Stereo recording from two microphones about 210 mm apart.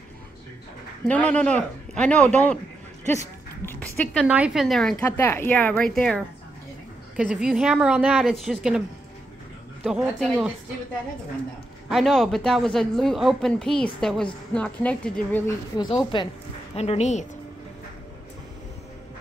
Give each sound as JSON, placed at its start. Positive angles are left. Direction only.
{"t": 1.0, "sound": "speech", "side_deg": 5}
{"t": 3.6, "sound": "a sound", "side_deg": 10}
{"t": 4.2, "sound": "speech", "side_deg": -5}
{"t": 9.8, "sound": "speech", "side_deg": -5}
{"t": 11.9, "sound": "speech", "side_deg": 0}
{"t": 16.1, "sound": "a woman's voice", "side_deg": 25}